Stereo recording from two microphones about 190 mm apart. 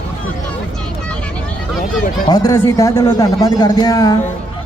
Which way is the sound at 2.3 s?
20° left (ahead or behind).